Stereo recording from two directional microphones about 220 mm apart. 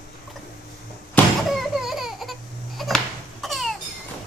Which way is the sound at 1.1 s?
Centre (ahead or behind).